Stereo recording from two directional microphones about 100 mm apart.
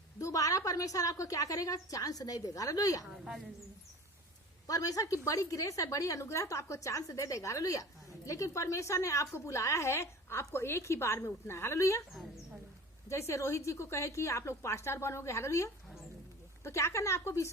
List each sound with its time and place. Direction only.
0.2 s a woman's voice: 35° left (ahead or behind)
3.1 s a woman's voice: centre (ahead or behind)
4.6 s a woman's voice: 35° left (ahead or behind)
13.1 s a woman's voice: 30° left (ahead or behind)